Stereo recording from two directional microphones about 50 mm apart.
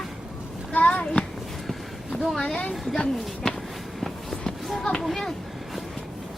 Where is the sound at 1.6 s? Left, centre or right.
Centre.